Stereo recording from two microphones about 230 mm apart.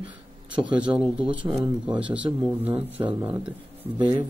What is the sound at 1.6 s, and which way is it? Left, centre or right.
Speech, centre.